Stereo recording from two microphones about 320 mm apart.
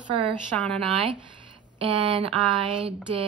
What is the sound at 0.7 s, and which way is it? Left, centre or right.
Speech, centre.